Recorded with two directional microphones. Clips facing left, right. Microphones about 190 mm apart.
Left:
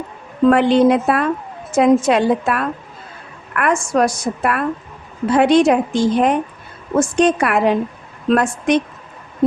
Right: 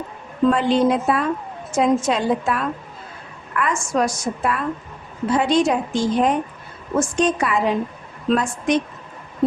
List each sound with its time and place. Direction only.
0.5 s a woman's voice: 65° left (ahead or behind)